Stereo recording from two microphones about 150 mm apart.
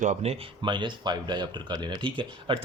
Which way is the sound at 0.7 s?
30° right (ahead or behind).